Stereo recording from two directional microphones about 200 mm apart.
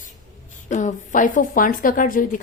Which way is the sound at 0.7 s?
40° left (ahead or behind).